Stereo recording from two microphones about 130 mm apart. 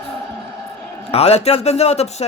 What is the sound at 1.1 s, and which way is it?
A man's voice, 50° left (ahead or behind).